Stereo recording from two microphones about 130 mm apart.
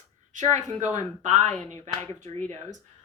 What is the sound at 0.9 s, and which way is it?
Speech, 65° right (ahead or behind).